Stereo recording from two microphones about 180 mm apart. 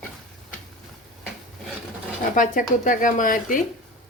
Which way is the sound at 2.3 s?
45° left (ahead or behind).